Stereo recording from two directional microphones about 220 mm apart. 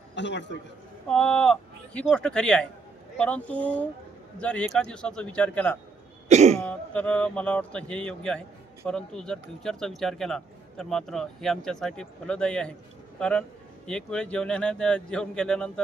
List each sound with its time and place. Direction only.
0.2 s a man's voice: 55° left (ahead or behind)
1.0 s a man's voice: 5° left (ahead or behind)
6.2 s throat clearing: 30° right (ahead or behind)
6.6 s a man's voice: 5° left (ahead or behind)